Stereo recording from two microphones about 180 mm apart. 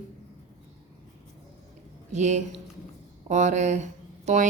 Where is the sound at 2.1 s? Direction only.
40° right (ahead or behind).